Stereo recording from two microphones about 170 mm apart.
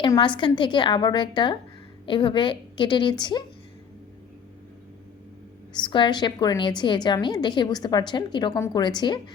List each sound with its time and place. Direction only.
0.2 s a woman's voice: 30° left (ahead or behind)
5.7 s a woman's voice: 25° left (ahead or behind)